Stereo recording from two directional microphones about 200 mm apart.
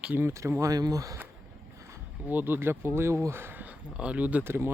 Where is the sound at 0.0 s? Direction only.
10° right (ahead or behind).